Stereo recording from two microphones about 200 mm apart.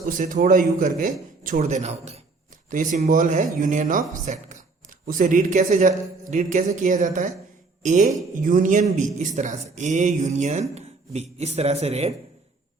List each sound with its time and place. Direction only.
0.0 s speech: 40° right (ahead or behind)